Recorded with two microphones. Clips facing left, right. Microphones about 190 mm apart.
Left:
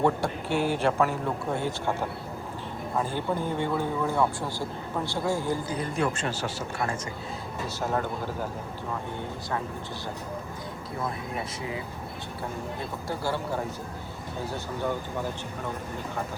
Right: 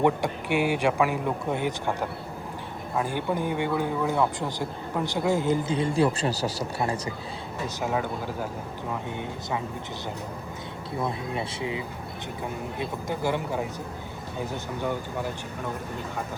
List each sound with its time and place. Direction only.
0.0 s speech: 15° right (ahead or behind); by 6.7 s 40° right (ahead or behind)
7.8 s speech: 10° right (ahead or behind)
12.8 s speech: 15° right (ahead or behind)